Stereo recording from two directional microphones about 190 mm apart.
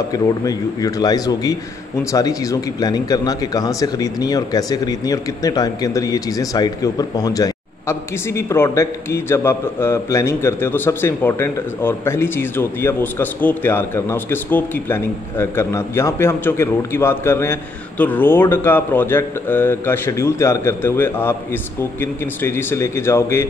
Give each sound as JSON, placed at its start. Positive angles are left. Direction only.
{"t": 0.1, "sound": "a man's voice", "side_deg": 20}